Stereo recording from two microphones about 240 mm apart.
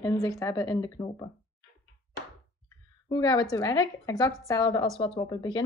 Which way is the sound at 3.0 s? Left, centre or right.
Centre.